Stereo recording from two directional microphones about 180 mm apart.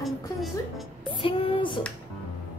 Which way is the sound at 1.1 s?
30° left (ahead or behind).